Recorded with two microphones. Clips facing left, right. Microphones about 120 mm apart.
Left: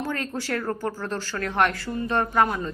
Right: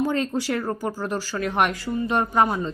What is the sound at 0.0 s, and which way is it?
Speech, 15° right (ahead or behind).